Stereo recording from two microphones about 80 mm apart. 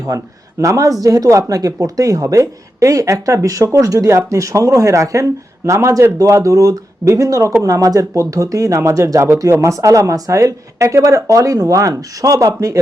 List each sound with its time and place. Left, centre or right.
0.6 s speech: right